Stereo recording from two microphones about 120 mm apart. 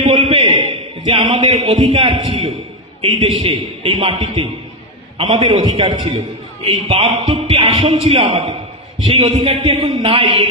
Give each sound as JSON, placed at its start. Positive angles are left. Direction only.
{"t": 0.2, "sound": "a sound", "side_deg": -50}
{"t": 1.7, "sound": "a man's voice", "side_deg": -50}
{"t": 7.1, "sound": "music", "side_deg": -60}
{"t": 7.5, "sound": "a man's voice", "side_deg": -40}